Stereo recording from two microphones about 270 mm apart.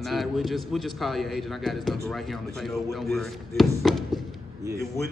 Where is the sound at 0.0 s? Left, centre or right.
Centre.